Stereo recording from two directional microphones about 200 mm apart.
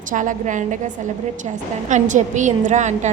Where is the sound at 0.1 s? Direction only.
40° right (ahead or behind).